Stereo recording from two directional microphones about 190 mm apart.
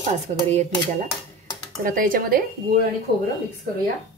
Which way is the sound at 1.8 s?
50° right (ahead or behind).